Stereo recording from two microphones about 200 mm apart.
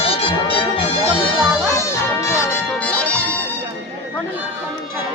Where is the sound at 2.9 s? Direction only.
5° left (ahead or behind).